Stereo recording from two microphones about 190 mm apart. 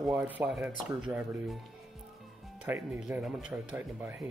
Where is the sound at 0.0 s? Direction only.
10° right (ahead or behind).